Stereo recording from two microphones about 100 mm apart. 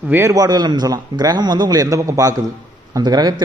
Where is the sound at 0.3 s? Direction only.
40° right (ahead or behind).